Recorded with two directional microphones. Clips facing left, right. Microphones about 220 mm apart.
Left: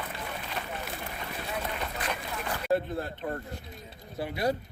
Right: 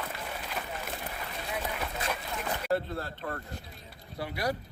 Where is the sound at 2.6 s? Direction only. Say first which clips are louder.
Left 4 dB; 20° left (ahead or behind).